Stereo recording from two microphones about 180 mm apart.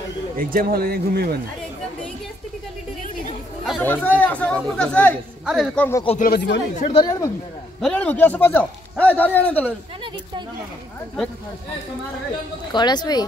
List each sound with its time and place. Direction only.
0.4 s speech: 50° right (ahead or behind)
3.8 s a man's voice: 10° left (ahead or behind)
5.8 s a man's voice: 15° left (ahead or behind)
6.0 s speech: 45° left (ahead or behind)
6.3 s speech: 75° left (ahead or behind)
6.8 s a woman's voice: 35° left (ahead or behind)
7.8 s a man's voice: 10° left (ahead or behind)
12.7 s speech: 25° left (ahead or behind)